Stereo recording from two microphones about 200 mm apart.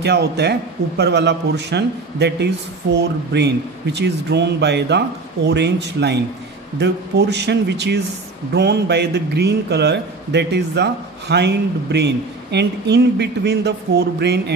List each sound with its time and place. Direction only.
0.0 s a man's voice: 55° right (ahead or behind)